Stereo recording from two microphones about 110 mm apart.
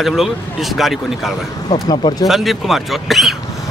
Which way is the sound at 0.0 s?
Centre (ahead or behind).